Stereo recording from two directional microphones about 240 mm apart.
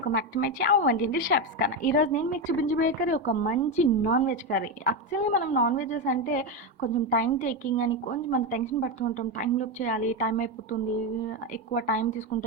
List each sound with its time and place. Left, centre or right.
0.0 s a woman's voice: left